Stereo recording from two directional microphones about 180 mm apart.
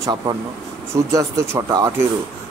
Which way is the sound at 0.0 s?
25° right (ahead or behind).